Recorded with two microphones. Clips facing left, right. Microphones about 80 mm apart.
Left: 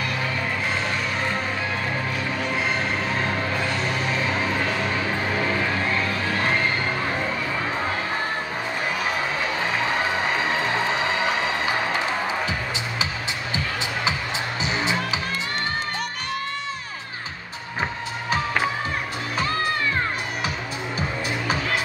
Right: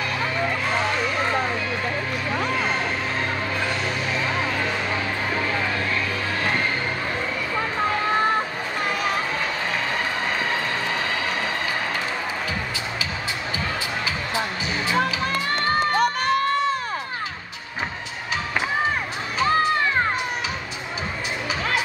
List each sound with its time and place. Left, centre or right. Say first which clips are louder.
14.0 s music: even; left
16.0 s music: right 9 dB; right